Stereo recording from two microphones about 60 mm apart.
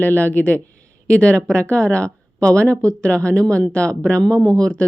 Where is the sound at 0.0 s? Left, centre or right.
Left.